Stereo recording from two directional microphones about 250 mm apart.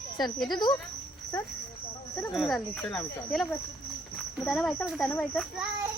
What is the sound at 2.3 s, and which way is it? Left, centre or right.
Speech, centre.